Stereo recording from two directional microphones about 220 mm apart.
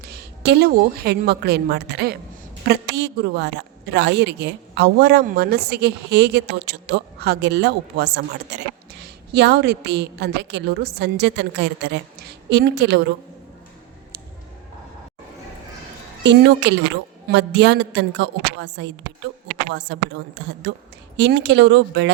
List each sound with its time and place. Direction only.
0.0 s a woman's voice: 45° right (ahead or behind)
16.2 s a woman's voice: 55° right (ahead or behind)